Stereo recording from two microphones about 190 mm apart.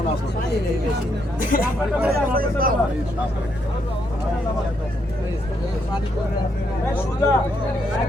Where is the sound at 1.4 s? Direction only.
45° left (ahead or behind).